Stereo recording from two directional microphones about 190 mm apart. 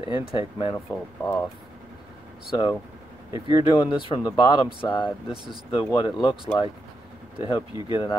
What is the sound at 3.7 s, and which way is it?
Speech, 20° left (ahead or behind).